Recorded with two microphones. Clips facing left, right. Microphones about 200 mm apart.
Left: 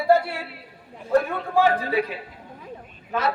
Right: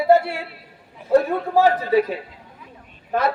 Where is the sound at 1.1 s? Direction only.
35° right (ahead or behind).